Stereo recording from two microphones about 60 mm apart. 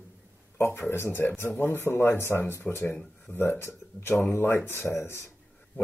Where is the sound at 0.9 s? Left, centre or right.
Left.